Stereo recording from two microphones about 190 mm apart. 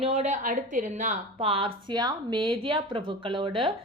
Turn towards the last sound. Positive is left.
turn(degrees=-30)  # may be behind; listen again after turning